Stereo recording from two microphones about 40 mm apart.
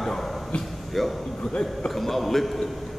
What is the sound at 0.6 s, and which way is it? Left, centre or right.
A man's voice, centre.